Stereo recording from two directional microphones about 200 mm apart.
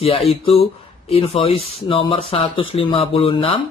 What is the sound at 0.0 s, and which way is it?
Speech, 30° left (ahead or behind).